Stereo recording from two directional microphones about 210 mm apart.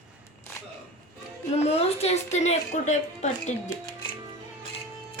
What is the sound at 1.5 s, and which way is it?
A woman's voice, 30° left (ahead or behind).